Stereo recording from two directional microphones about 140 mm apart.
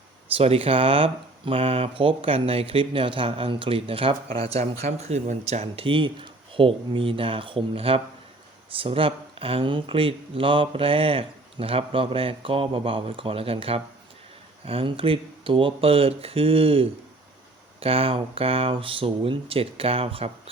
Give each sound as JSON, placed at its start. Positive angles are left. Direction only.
{"t": 0.3, "sound": "speech", "side_deg": -45}